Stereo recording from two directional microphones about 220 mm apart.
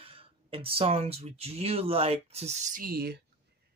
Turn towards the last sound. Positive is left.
turn(degrees=-45)  # may be behind; listen again after turning